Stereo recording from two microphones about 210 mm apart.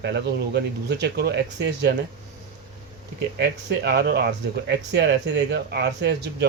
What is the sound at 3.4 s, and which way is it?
Speech, 50° right (ahead or behind).